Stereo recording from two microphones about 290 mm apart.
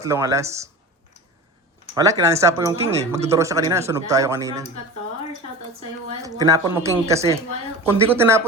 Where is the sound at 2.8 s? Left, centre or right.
Right.